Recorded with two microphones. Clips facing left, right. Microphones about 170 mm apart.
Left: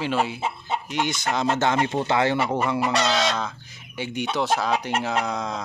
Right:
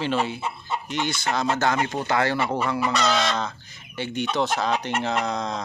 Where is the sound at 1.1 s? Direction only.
20° left (ahead or behind).